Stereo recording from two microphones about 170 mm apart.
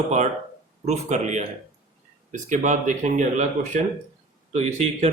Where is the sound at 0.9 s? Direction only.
40° right (ahead or behind).